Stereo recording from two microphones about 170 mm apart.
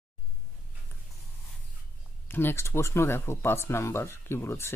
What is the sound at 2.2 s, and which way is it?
Speech, 15° left (ahead or behind).